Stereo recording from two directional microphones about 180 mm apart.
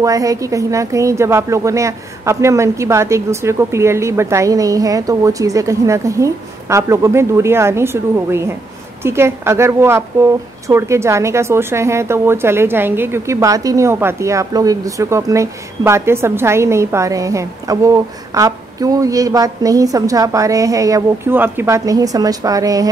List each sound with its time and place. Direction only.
0.0 s a woman's voice: 20° right (ahead or behind)